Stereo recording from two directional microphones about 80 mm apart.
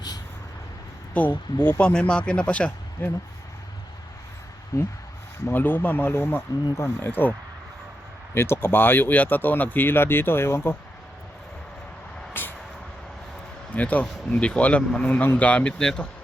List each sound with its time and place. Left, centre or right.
1.1 s speech: centre
4.7 s speech: left
5.5 s speech: left
8.4 s speech: left
12.3 s vehicle: left
13.7 s speech: centre